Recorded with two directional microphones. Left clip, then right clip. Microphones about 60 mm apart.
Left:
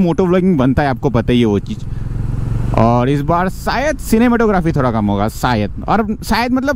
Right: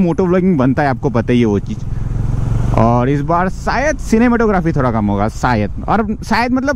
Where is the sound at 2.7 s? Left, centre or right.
Left.